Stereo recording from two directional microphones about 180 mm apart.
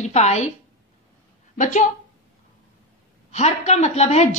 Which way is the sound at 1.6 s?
45° left (ahead or behind).